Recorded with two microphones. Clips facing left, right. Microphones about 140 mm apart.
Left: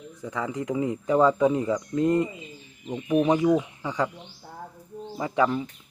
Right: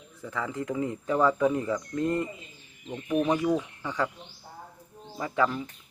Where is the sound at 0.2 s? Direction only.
15° left (ahead or behind).